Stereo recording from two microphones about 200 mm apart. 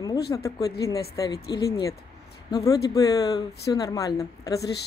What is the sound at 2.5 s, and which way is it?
A woman's voice, 15° left (ahead or behind).